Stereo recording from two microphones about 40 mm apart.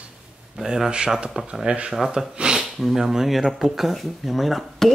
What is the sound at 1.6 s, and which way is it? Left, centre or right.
Speech, right.